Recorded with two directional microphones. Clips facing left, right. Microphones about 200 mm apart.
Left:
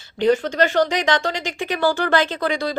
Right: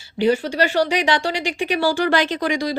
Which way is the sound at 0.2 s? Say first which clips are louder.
Left 1 dB; 10° right (ahead or behind).